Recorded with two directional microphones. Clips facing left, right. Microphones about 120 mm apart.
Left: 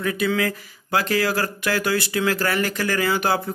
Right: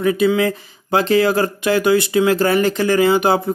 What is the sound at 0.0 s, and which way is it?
Speech, 25° right (ahead or behind).